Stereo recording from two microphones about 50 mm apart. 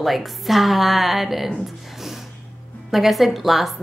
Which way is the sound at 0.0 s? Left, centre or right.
Centre.